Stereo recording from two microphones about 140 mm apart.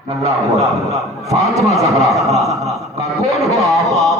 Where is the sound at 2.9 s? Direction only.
25° right (ahead or behind).